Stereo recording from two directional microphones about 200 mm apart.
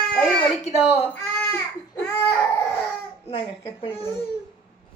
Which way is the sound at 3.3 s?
25° left (ahead or behind).